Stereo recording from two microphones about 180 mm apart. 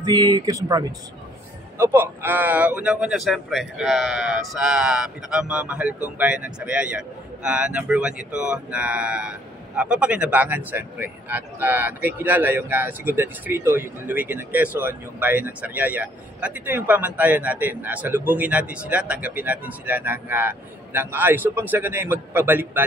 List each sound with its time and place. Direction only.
0.0 s speech: 20° right (ahead or behind)